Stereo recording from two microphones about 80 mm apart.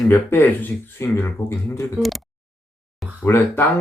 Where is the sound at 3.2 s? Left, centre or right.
Left.